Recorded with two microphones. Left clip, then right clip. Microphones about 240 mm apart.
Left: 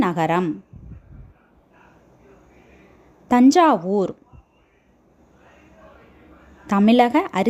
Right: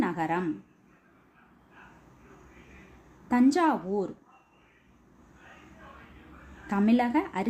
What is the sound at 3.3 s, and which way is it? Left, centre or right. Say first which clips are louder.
Speech: left 10 dB; left.